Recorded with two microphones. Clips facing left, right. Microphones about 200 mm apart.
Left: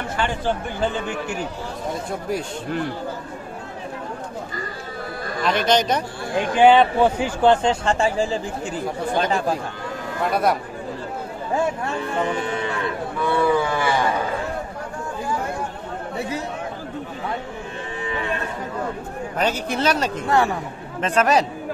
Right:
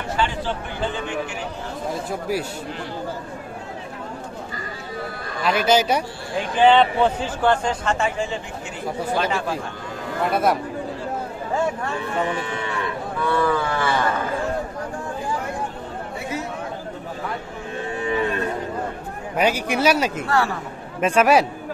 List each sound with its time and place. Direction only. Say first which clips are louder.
0.2 s chatter: right 1 dB; 50° left (ahead or behind)
2.0 s a man's voice: right 1 dB; 5° right (ahead or behind)
5.4 s speech: right 1 dB; 5° right (ahead or behind)
6.6 s a man's voice: left 1 dB; 10° left (ahead or behind)
7.6 s speech: left 3 dB; 30° left (ahead or behind)
10.3 s a man's voice: even; centre (ahead or behind)
13.2 s a man's voice: left 2 dB; 15° left (ahead or behind)
19.3 s speech: right 3 dB; 10° right (ahead or behind)